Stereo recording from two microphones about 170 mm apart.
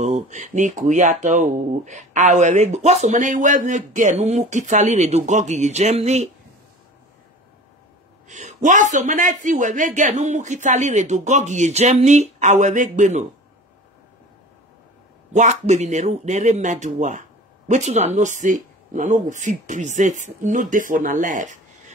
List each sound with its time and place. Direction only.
0.0 s speech: 45° right (ahead or behind)
8.3 s speech: 45° right (ahead or behind)
15.3 s speech: 45° right (ahead or behind)